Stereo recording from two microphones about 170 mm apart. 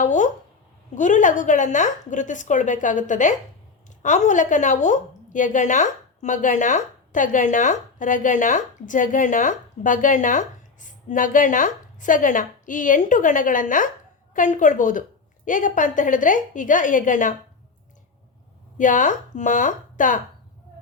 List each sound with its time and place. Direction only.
0.0 s a sound: 45° left (ahead or behind)
0.9 s speech: 45° left (ahead or behind)
18.8 s speech: 50° left (ahead or behind)